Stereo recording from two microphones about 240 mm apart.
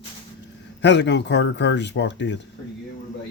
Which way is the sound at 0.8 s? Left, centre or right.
Left.